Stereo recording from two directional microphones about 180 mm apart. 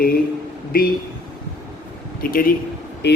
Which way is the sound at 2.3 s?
50° left (ahead or behind).